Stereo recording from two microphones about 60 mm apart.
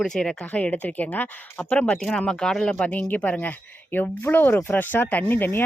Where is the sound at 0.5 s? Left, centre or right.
Left.